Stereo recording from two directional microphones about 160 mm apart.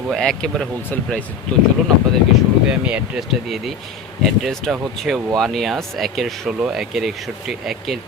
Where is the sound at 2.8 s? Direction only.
5° right (ahead or behind).